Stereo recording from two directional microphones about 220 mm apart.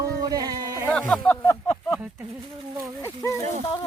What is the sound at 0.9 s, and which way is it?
Music, centre (ahead or behind).